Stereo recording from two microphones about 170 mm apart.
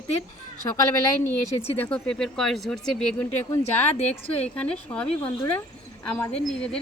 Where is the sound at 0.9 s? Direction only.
15° left (ahead or behind).